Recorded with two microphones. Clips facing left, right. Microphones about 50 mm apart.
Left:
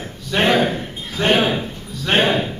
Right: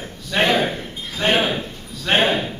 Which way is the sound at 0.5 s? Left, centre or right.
Centre.